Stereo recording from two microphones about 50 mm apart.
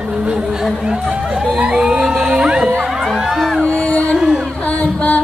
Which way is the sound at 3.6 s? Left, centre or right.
Centre.